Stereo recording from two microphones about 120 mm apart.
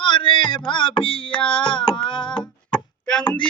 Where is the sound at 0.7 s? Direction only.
40° left (ahead or behind).